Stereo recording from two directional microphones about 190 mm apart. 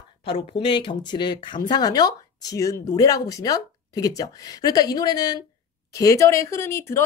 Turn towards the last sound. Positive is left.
turn(degrees=15)  # may be behind; listen again after turning